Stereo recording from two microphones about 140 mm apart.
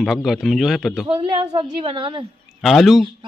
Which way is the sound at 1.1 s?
40° right (ahead or behind).